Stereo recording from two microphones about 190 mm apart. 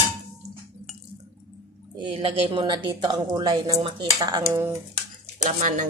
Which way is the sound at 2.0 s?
25° right (ahead or behind).